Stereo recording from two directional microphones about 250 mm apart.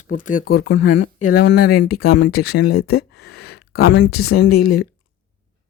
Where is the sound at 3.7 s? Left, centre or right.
Left.